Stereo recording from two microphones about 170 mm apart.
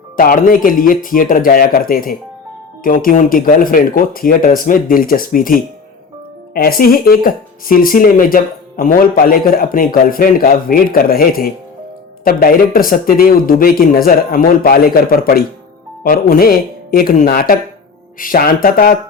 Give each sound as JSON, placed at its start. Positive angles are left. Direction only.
{"t": 0.2, "sound": "speech", "side_deg": 55}